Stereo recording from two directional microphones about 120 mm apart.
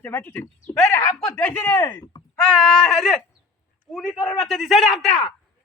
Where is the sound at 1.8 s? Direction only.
25° left (ahead or behind).